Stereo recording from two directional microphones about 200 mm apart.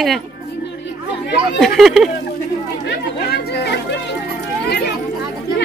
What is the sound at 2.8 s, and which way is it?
Chatter, 55° left (ahead or behind).